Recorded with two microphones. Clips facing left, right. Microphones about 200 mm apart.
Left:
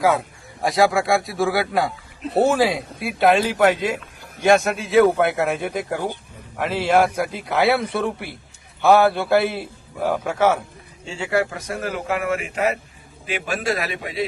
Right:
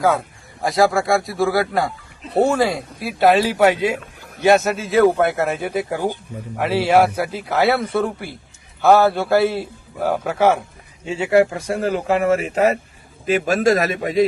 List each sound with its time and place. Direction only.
0.0 s speech: centre (ahead or behind)
11.0 s a man's voice: 20° right (ahead or behind); by 14.3 s 45° right (ahead or behind)